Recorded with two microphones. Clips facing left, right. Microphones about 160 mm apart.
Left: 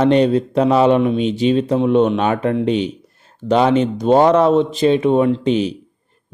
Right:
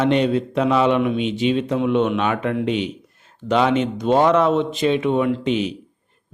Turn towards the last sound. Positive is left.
turn(degrees=35)  # may be behind; listen again after turning